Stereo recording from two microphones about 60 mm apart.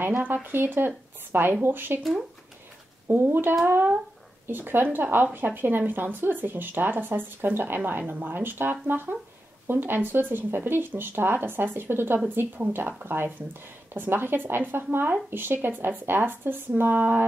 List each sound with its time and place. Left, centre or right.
0.2 s speech: right
3.1 s speech: right